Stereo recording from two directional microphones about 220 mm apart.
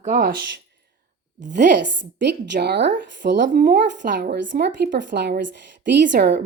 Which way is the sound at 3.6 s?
35° right (ahead or behind).